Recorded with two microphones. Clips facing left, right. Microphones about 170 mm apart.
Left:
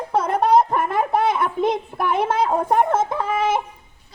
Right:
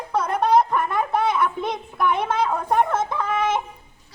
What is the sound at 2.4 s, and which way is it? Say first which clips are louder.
Speech: left 2 dB; 25° left (ahead or behind).